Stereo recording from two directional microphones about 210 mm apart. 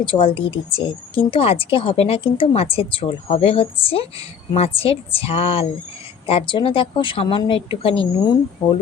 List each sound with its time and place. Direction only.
0.0 s speech: 25° left (ahead or behind)